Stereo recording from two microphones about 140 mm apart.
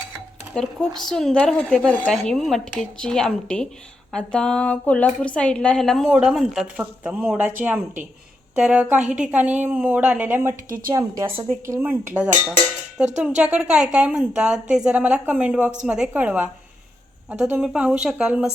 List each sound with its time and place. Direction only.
0.5 s speech: 5° left (ahead or behind)
6.1 s a woman's voice: 5° right (ahead or behind)
8.5 s a woman's voice: 10° right (ahead or behind)
10.9 s a woman's voice: 25° right (ahead or behind); by 18.5 s 5° right (ahead or behind)